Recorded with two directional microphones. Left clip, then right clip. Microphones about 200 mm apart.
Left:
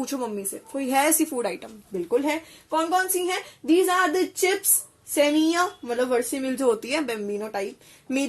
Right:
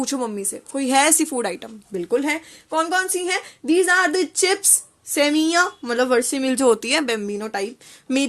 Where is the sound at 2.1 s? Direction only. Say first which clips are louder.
Right 3 dB; 45° right (ahead or behind).